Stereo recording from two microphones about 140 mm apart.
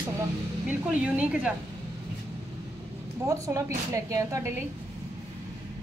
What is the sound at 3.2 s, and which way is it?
A woman's voice, 20° right (ahead or behind).